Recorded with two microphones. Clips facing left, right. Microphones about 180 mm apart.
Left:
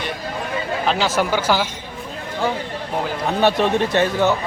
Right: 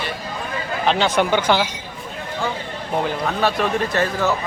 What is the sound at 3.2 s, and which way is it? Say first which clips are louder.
A man's voice: left 8 dB; 25° left (ahead or behind).